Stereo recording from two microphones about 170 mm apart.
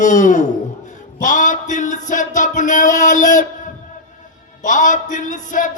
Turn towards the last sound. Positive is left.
turn(degrees=50)  # may be behind; listen again after turning